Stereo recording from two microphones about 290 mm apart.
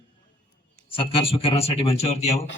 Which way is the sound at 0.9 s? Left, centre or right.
Centre.